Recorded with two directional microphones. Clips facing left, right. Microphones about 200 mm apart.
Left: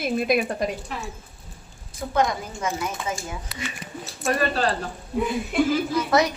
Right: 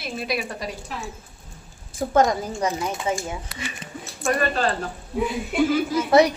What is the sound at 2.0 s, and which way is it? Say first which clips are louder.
Speech: right 4 dB; 45° right (ahead or behind).